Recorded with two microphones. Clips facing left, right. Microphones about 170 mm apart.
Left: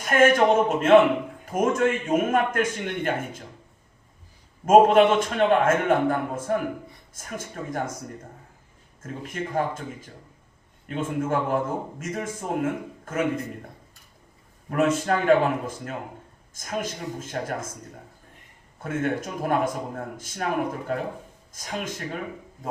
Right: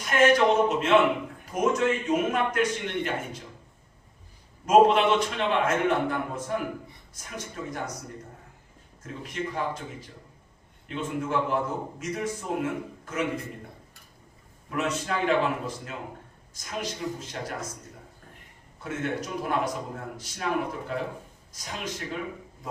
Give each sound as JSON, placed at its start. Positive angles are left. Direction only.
{"t": 0.0, "sound": "a man's voice", "side_deg": 50}
{"t": 4.6, "sound": "a man's voice", "side_deg": 50}
{"t": 9.0, "sound": "a man's voice", "side_deg": 50}
{"t": 14.7, "sound": "a man's voice", "side_deg": 50}